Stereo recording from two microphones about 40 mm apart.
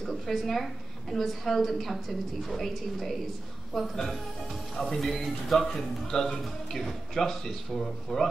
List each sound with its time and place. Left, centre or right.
0.1 s a woman's voice: centre